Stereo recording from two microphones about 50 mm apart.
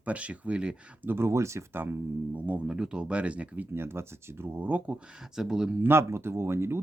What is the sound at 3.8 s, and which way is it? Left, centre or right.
Speech, right.